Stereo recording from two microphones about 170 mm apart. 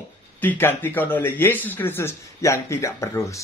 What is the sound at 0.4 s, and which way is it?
Speech, 10° left (ahead or behind).